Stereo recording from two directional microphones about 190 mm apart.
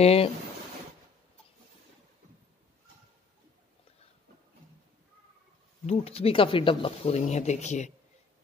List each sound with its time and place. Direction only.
0.0 s speech: 30° left (ahead or behind)
5.9 s speech: 35° left (ahead or behind)